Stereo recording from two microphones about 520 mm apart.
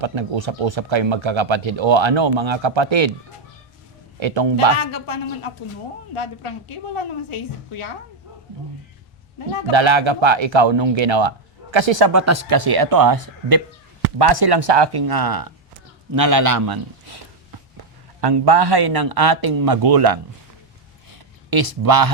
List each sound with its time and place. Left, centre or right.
0.0 s speech: right
4.2 s speech: right
4.8 s a woman's voice: left
9.7 s speech: right
12.1 s speech: right
12.5 s a man's voice: right
18.2 s a man's voice: right
21.1 s a sound: right